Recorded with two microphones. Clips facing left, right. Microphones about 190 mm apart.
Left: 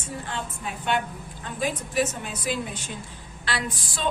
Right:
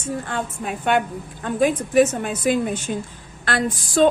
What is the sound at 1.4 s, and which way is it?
A woman's voice, 55° right (ahead or behind).